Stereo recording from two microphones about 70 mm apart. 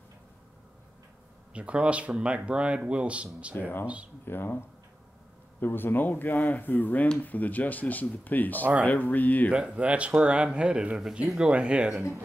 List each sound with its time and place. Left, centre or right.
1.5 s speech: centre
3.5 s speech: left
3.8 s speech: centre
4.3 s speech: left
9.5 s speech: centre